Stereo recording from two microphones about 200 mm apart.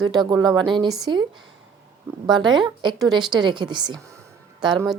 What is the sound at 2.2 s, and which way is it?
A woman's voice, 20° right (ahead or behind).